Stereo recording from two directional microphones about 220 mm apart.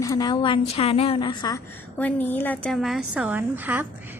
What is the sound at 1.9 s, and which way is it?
A woman's voice, 10° left (ahead or behind).